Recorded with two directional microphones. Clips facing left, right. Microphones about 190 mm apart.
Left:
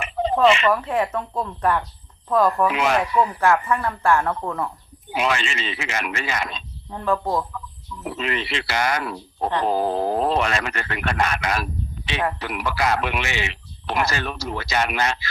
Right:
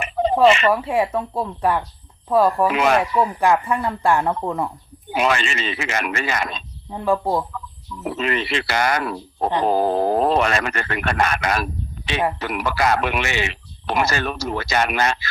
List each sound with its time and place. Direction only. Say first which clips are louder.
0.4 s a man's voice: right 2 dB; 45° right (ahead or behind)
0.7 s speech: right 2 dB; 10° right (ahead or behind)
5.1 s a man's voice: right 3 dB; 50° right (ahead or behind)
6.9 s speech: right 2 dB; 15° right (ahead or behind)
8.0 s a man's voice: right 4 dB; 45° right (ahead or behind)